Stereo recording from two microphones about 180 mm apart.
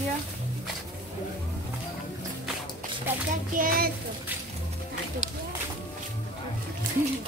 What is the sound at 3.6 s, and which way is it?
Child singing, 55° right (ahead or behind).